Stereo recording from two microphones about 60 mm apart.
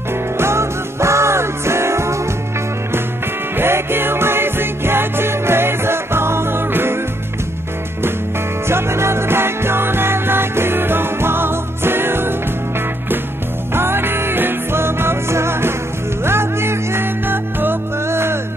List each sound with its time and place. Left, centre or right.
0.4 s music: right
3.5 s music: right
8.6 s music: right
13.7 s music: right